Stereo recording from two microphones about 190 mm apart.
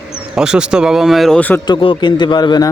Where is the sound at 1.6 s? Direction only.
25° left (ahead or behind).